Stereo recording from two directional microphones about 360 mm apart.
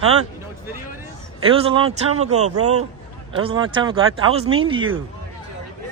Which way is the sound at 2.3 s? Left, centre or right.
Right.